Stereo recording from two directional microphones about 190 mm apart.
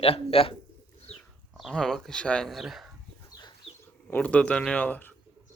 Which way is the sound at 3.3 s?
20° left (ahead or behind).